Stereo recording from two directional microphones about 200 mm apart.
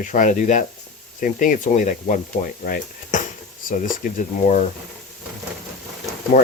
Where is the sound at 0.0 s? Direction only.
40° left (ahead or behind).